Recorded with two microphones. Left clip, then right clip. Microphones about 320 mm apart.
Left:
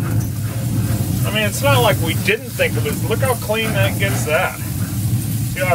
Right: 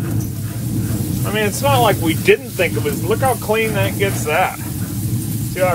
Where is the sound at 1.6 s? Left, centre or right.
Centre.